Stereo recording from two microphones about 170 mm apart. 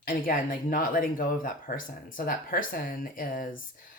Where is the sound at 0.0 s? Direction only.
55° left (ahead or behind).